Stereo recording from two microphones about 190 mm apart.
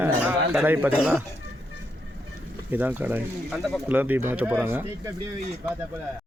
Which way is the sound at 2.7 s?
10° right (ahead or behind).